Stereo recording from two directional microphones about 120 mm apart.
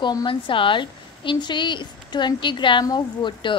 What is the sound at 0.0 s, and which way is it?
A woman's voice, 40° left (ahead or behind).